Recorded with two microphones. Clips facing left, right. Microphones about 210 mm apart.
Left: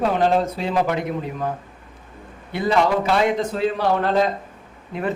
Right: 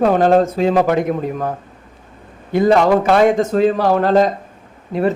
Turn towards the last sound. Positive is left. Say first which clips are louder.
# right 8 dB
turn(degrees=-40)  # may be behind; listen again after turning